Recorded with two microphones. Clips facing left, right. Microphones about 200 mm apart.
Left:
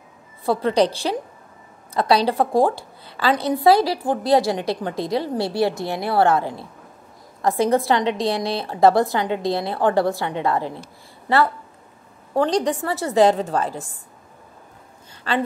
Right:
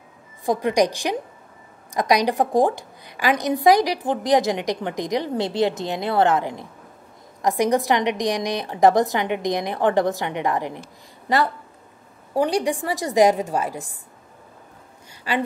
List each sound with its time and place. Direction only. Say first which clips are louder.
0.5 s a woman's voice: left 1 dB; 15° right (ahead or behind)
12.4 s a woman's voice: left 1 dB; 10° right (ahead or behind)
15.3 s a woman's voice: left 1 dB; 10° right (ahead or behind)